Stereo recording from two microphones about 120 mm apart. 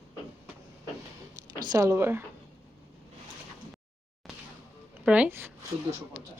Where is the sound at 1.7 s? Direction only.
25° right (ahead or behind).